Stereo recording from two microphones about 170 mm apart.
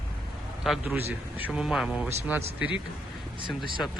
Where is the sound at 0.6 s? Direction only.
Centre (ahead or behind).